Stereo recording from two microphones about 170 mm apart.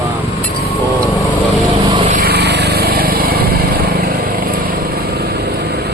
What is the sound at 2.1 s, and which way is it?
Vehicle, 65° right (ahead or behind).